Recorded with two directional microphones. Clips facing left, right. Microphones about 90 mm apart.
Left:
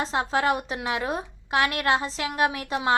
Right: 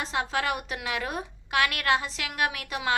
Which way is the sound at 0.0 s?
30° left (ahead or behind).